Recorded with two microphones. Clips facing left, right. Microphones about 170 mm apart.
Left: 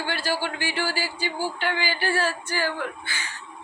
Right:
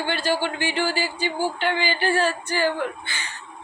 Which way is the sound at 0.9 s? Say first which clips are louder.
Right 3 dB; 5° left (ahead or behind).